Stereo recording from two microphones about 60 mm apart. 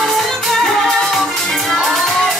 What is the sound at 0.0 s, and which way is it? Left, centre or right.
Music, centre.